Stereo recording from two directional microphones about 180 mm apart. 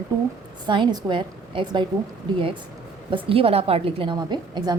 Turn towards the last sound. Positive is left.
turn(degrees=-25)  # may be behind; listen again after turning